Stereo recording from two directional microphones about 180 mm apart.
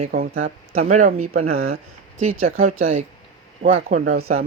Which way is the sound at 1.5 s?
55° right (ahead or behind).